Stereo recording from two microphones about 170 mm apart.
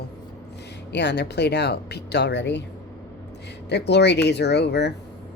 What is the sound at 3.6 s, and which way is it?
Speech, 85° left.